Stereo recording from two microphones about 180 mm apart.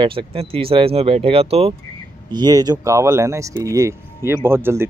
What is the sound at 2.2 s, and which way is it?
Speech, 25° right (ahead or behind).